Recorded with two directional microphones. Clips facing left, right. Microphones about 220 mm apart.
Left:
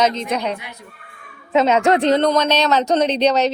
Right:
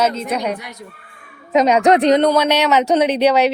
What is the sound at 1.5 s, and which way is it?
A woman's voice, 15° right (ahead or behind).